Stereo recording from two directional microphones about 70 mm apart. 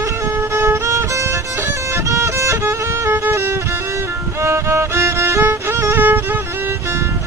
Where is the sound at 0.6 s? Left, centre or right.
Right.